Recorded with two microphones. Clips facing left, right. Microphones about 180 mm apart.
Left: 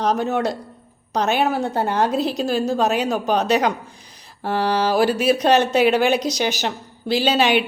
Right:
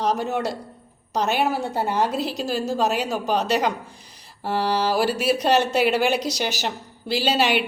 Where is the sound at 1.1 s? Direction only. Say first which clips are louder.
Left 3 dB; 5° right (ahead or behind).